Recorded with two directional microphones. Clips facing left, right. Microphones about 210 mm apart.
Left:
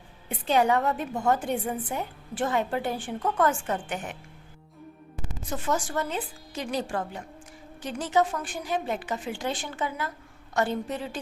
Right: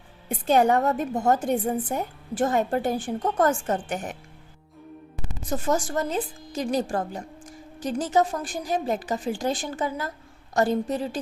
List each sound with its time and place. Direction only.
0.3 s a woman's voice: 45° right (ahead or behind)
5.5 s a woman's voice: 40° right (ahead or behind)